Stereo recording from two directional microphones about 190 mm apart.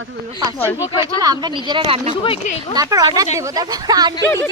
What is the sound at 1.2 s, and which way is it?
Speech, 20° right (ahead or behind).